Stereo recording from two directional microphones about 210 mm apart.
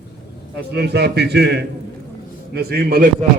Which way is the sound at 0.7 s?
50° right (ahead or behind).